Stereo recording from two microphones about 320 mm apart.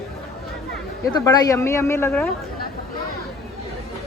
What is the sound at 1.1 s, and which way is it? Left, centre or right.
Speech, centre.